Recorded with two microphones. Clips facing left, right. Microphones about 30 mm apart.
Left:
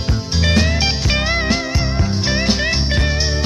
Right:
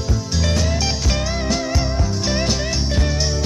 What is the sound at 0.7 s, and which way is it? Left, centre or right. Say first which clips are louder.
Music: left 3 dB; left.